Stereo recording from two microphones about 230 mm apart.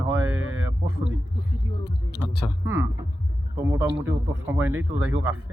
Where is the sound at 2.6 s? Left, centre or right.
Centre.